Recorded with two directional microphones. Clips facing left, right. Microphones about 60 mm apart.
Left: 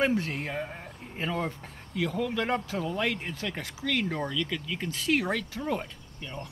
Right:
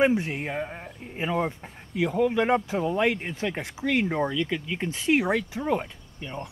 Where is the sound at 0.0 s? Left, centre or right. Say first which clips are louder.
Right 4 dB; centre.